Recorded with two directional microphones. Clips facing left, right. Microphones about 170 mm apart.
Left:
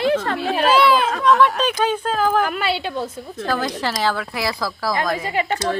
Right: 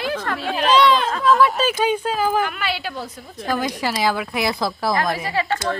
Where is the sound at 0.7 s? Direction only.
5° left (ahead or behind).